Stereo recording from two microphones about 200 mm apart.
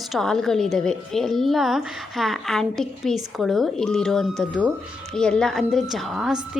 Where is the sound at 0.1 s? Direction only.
Centre (ahead or behind).